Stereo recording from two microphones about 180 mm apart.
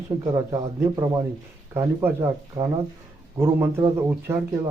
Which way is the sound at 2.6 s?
25° right (ahead or behind).